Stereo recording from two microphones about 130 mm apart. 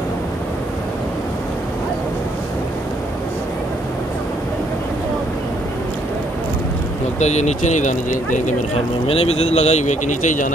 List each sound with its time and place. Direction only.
7.2 s speech: 60° left (ahead or behind); by 8.5 s 75° left (ahead or behind)
9.0 s speech: 50° left (ahead or behind); by 10.5 s 80° left